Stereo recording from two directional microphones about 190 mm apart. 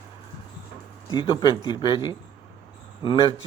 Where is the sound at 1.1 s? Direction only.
25° left (ahead or behind).